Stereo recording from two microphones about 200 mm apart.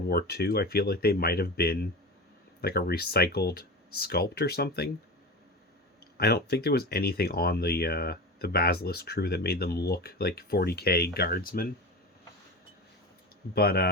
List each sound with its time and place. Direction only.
0.1 s speech: 50° left (ahead or behind)
6.1 s speech: 55° left (ahead or behind)
13.5 s speech: 50° left (ahead or behind)